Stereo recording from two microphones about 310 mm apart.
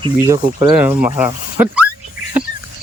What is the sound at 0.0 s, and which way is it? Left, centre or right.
Speech, centre.